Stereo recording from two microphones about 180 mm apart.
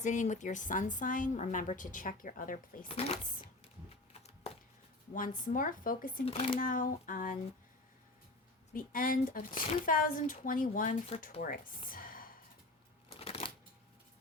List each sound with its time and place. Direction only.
0.0 s speech: 40° left (ahead or behind)
2.9 s speech: 35° left (ahead or behind)
5.1 s speech: 45° left (ahead or behind)
6.2 s speech: 35° left (ahead or behind)
6.6 s speech: 50° left (ahead or behind)
8.7 s speech: 50° left (ahead or behind)
11.9 s a sound: 50° left (ahead or behind)
13.1 s a sound: 35° left (ahead or behind)